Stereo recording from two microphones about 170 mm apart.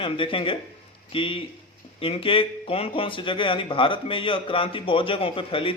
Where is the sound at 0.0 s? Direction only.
30° left (ahead or behind).